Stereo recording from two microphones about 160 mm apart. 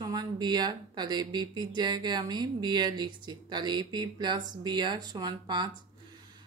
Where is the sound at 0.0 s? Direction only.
25° right (ahead or behind).